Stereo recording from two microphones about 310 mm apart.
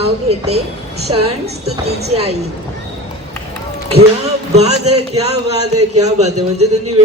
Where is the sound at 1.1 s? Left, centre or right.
Centre.